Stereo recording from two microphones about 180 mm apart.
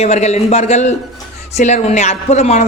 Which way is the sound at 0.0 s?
35° left (ahead or behind).